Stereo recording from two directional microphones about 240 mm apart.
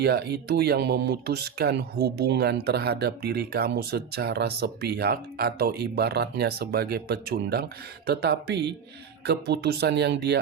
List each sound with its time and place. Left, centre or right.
0.0 s speech: right